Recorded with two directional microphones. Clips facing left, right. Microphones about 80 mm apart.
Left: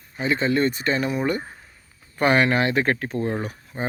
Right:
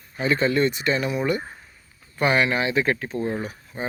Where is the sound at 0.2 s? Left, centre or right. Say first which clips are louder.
Right 1 dB; left.